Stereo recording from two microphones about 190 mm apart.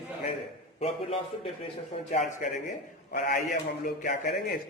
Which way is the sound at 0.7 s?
30° left (ahead or behind).